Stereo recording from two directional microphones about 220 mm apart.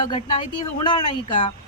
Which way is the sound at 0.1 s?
25° left (ahead or behind).